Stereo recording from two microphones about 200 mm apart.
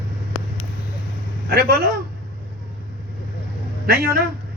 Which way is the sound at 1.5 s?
50° right (ahead or behind).